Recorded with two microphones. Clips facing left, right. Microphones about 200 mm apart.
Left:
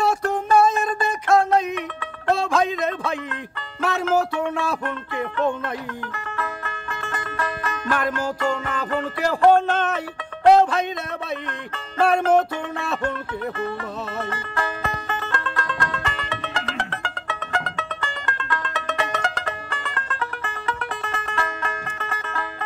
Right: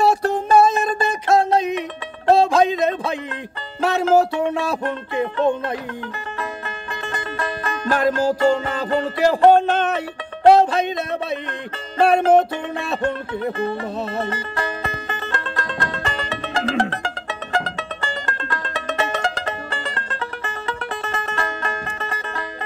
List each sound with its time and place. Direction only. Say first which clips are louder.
0.0 s a sound: right 4 dB; 35° right (ahead or behind)
1.6 s music: right 4 dB; 20° right (ahead or behind)
2.2 s a sound: right 6 dB; 35° right (ahead or behind)
3.8 s music: right 5 dB; 30° right (ahead or behind)
10.4 s music: right 2 dB; 30° right (ahead or behind)
12.0 s music: right 3 dB; 30° right (ahead or behind)